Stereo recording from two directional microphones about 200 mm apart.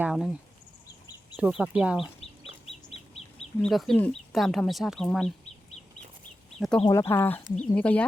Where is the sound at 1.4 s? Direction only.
5° right (ahead or behind).